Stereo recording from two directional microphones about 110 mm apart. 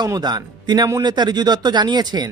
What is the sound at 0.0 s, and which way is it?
Speech, 40° right (ahead or behind).